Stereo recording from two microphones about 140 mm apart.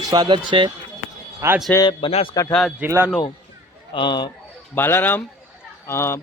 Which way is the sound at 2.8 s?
15° right (ahead or behind).